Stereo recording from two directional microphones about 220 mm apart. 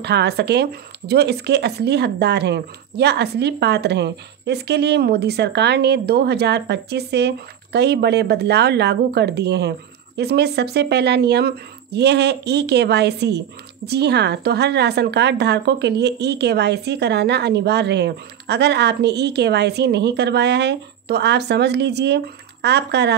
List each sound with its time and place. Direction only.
0.0 s speech: 50° right (ahead or behind)